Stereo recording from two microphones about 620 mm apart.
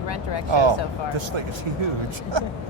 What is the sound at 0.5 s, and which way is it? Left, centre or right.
Speech, right.